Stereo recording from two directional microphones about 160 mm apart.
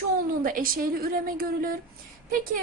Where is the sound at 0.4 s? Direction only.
60° right (ahead or behind).